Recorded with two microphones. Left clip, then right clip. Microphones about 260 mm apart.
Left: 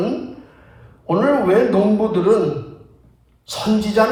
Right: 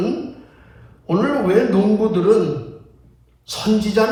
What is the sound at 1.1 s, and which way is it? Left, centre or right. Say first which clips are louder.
Speech: left 2 dB; left.